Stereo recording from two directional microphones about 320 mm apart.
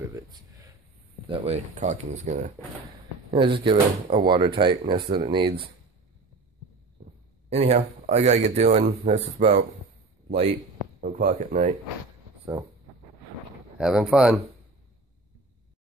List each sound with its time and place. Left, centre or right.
1.3 s a man's voice: centre
7.4 s a man's voice: centre
11.0 s a man's voice: right
13.7 s speech: centre